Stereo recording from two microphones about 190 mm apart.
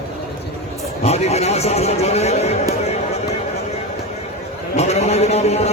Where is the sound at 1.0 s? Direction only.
35° left (ahead or behind).